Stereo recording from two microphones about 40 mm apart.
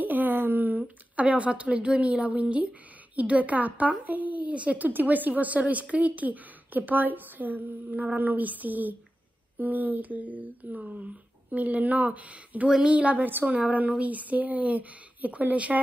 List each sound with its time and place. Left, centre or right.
0.0 s a sound: right
3.2 s speech: right
4.7 s speech: right
13.2 s speech: right
13.5 s speech: right